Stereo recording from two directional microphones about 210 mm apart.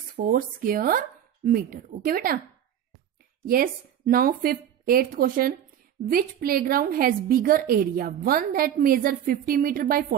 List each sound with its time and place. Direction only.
0.1 s speech: 40° right (ahead or behind)
3.4 s a woman's voice: 45° right (ahead or behind)